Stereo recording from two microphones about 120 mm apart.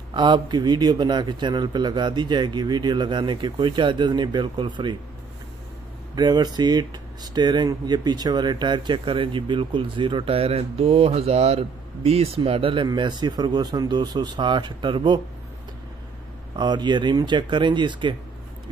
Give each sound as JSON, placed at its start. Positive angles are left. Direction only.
{"t": 0.1, "sound": "speech", "side_deg": -40}
{"t": 6.1, "sound": "speech", "side_deg": -35}
{"t": 12.8, "sound": "speech", "side_deg": -40}
{"t": 16.5, "sound": "speech", "side_deg": -40}